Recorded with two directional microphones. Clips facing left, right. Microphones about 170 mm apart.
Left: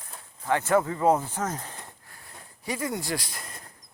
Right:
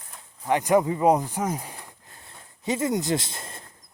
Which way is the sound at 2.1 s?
25° right (ahead or behind).